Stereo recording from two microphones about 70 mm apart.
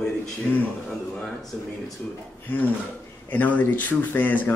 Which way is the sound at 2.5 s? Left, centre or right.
Left.